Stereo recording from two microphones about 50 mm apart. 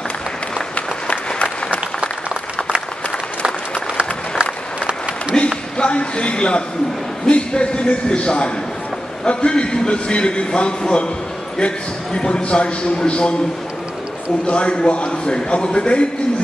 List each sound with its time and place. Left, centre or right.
0.7 s applause: left
5.3 s a sound: centre
7.2 s a man's voice: left
14.5 s a man's voice: left